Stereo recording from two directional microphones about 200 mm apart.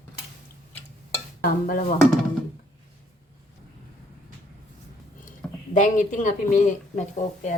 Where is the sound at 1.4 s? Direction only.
45° left (ahead or behind).